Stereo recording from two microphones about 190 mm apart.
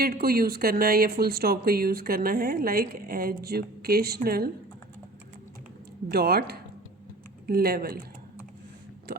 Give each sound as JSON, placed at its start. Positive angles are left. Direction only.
{"t": 0.0, "sound": "speech", "side_deg": -50}
{"t": 6.1, "sound": "speech", "side_deg": -55}
{"t": 7.4, "sound": "speech", "side_deg": -55}
{"t": 9.1, "sound": "speech", "side_deg": -55}